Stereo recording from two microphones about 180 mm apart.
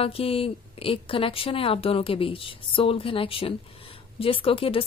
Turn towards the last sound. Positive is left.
turn(degrees=30)  # may be behind; listen again after turning